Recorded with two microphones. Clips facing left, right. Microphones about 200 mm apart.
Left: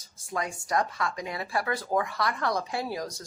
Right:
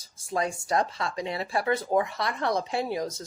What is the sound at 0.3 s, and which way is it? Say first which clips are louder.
Speech: right 2 dB; 25° right (ahead or behind).